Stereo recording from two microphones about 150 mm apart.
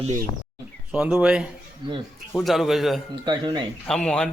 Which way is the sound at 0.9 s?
5° right (ahead or behind).